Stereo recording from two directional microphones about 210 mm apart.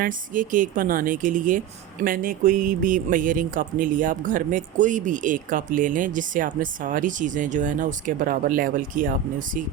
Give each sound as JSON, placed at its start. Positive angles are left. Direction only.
{"t": 0.0, "sound": "speech", "side_deg": -40}